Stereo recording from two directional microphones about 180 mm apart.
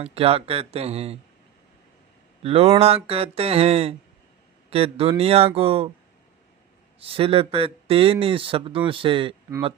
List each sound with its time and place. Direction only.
0.0 s speech: 35° right (ahead or behind)
2.4 s speech: 35° right (ahead or behind)
7.0 s speech: 30° right (ahead or behind)